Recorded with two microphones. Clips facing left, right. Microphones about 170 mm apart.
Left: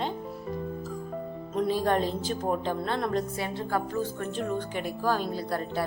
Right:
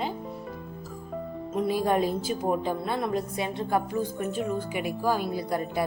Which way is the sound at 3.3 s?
20° right (ahead or behind).